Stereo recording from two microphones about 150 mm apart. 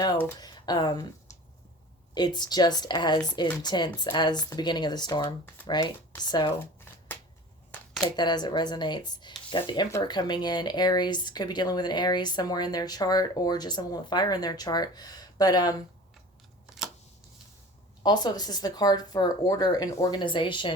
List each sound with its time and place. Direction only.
0.3 s speech: 25° left (ahead or behind)
8.0 s speech: 30° left (ahead or behind)
18.0 s speech: 30° left (ahead or behind)